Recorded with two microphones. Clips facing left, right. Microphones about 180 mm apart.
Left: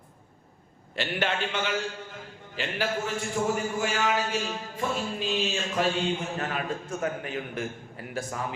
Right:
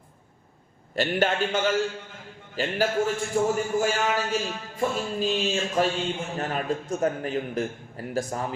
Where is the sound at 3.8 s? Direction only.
40° right (ahead or behind).